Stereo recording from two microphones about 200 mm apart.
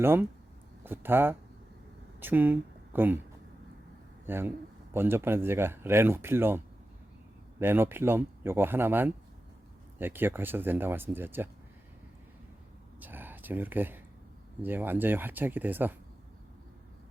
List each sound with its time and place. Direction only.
0.0 s speech: 10° right (ahead or behind)
4.3 s speech: 10° right (ahead or behind)
7.6 s speech: 10° right (ahead or behind)
13.0 s a sound: 10° right (ahead or behind)
14.6 s speech: 10° right (ahead or behind)